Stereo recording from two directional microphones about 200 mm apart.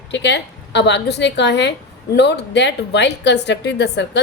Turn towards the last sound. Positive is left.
turn(degrees=60)  # may be behind; listen again after turning